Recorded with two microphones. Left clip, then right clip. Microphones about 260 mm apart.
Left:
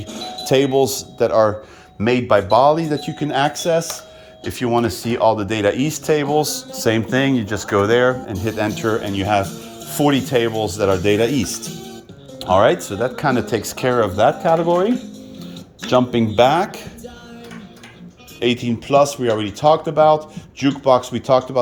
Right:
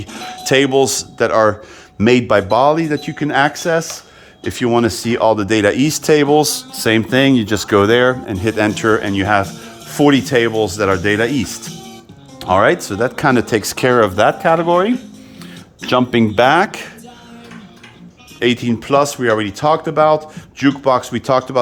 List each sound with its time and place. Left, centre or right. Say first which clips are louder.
0.1 s speech: right 3 dB; centre
2.0 s speech: right 3 dB; right
16.1 s speech: right 5 dB; centre
18.3 s speech: right 3 dB; centre